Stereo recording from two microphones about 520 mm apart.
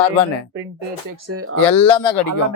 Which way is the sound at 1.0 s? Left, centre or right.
Right.